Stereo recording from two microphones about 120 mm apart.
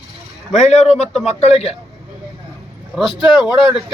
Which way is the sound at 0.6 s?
70° left (ahead or behind).